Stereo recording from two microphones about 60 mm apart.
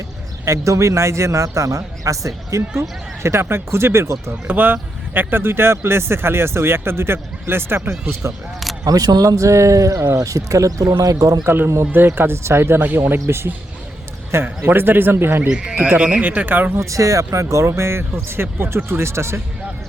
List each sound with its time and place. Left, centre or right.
0.4 s a man's voice: right
4.4 s speech: right
8.8 s speech: right
11.4 s speech: right
13.1 s speech: right
15.4 s speech: centre
15.8 s speech: right
16.8 s speech: right